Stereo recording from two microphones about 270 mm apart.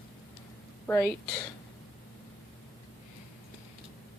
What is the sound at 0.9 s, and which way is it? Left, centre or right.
Speech, centre.